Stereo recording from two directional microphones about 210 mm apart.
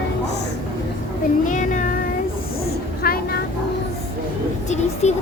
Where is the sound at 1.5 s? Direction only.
40° left (ahead or behind).